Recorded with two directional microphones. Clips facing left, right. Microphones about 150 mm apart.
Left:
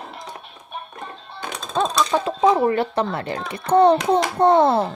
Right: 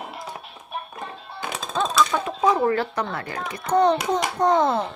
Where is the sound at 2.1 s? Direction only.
25° left (ahead or behind).